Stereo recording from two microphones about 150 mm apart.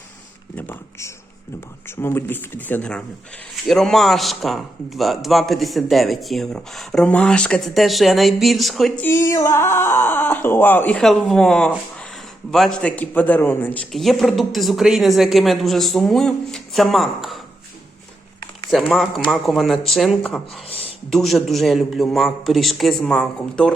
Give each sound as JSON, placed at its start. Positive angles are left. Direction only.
{"t": 0.5, "sound": "a sound", "side_deg": 15}
{"t": 1.9, "sound": "speech", "side_deg": 15}
{"t": 9.0, "sound": "speech", "side_deg": 20}
{"t": 13.9, "sound": "speech", "side_deg": 0}
{"t": 18.7, "sound": "speech", "side_deg": 0}